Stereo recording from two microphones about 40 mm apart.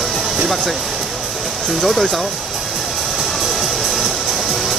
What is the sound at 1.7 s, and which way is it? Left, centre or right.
Speech, centre.